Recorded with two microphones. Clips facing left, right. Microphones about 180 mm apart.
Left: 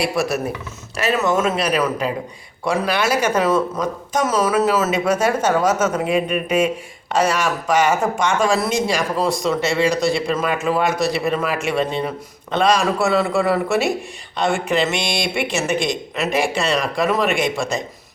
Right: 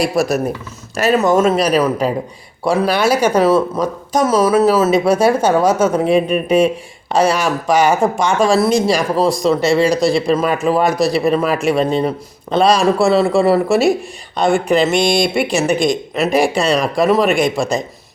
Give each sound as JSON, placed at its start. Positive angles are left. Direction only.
{"t": 0.0, "sound": "speech", "side_deg": -40}